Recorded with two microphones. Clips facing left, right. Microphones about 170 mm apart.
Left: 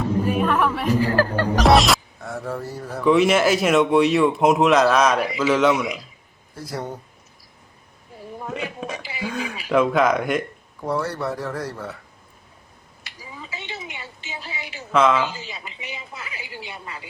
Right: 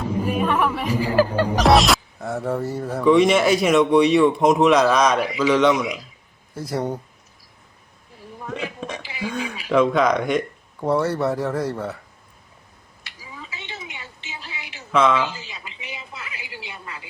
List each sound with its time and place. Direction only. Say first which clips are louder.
0.0 s speech: left 1 dB; 10° right (ahead or behind)
1.5 s speech: even; centre (ahead or behind)
2.2 s speech: right 5 dB; 25° right (ahead or behind)
3.0 s speech: right 1 dB; centre (ahead or behind)
6.7 s speech: right 5 dB; 25° right (ahead or behind)
8.4 s speech: even; 5° left (ahead or behind)
10.8 s speech: right 4 dB; 25° right (ahead or behind)
14.9 s speech: even; centre (ahead or behind)